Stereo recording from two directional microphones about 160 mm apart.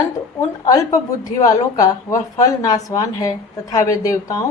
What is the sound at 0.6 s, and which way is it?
Speech, 20° left (ahead or behind).